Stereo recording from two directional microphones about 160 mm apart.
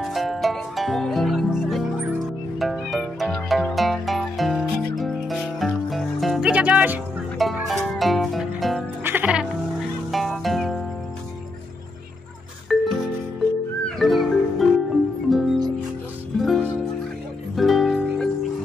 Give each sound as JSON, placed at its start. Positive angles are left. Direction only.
{"t": 0.0, "sound": "music", "side_deg": 0}
{"t": 7.3, "sound": "zither", "side_deg": 0}
{"t": 9.0, "sound": "music", "side_deg": -10}
{"t": 12.6, "sound": "music", "side_deg": 0}